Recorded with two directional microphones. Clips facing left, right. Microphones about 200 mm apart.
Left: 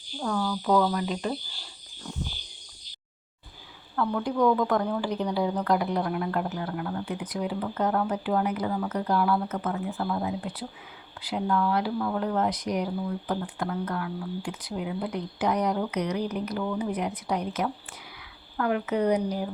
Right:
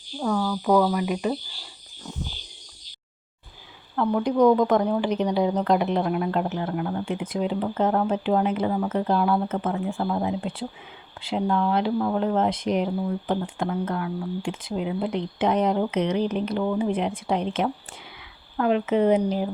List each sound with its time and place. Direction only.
0.2 s speech: 10° right (ahead or behind)
3.9 s a woman's voice: 20° right (ahead or behind)